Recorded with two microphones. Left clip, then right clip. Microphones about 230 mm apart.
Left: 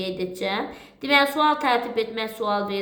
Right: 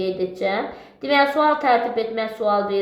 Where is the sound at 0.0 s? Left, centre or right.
Left.